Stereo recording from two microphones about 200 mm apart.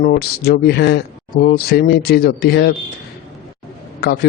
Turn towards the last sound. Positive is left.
turn(degrees=55)  # may be behind; listen again after turning